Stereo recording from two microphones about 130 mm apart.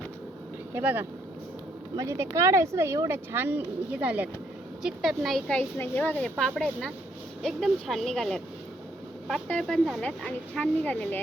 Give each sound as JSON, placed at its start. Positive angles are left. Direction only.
{"t": 0.7, "sound": "a woman's voice", "side_deg": -15}
{"t": 5.5, "sound": "a woman's voice", "side_deg": 15}